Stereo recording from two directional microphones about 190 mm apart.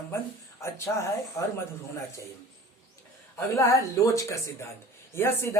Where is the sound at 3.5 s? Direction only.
15° left (ahead or behind).